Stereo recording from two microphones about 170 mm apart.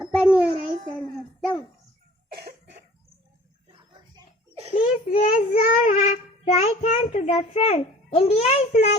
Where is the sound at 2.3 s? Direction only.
70° right (ahead or behind).